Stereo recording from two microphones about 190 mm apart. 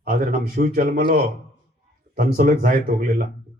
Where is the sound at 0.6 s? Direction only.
50° right (ahead or behind).